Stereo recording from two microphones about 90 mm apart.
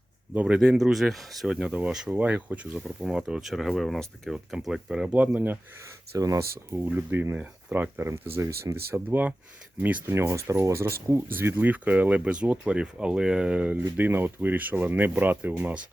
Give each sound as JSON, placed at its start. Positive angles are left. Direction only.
{"t": 0.3, "sound": "speech", "side_deg": -10}
{"t": 1.5, "sound": "speech", "side_deg": -15}
{"t": 5.1, "sound": "speech", "side_deg": -20}
{"t": 5.8, "sound": "speech", "side_deg": -40}
{"t": 6.9, "sound": "speech", "side_deg": -25}